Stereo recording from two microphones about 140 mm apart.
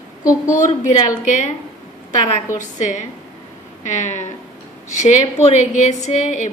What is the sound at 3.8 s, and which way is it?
A woman's voice, 60° left (ahead or behind).